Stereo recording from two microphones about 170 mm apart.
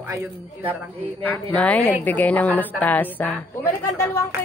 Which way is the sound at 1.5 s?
10° left (ahead or behind).